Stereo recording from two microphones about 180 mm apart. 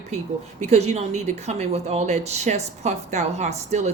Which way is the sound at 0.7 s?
35° right (ahead or behind).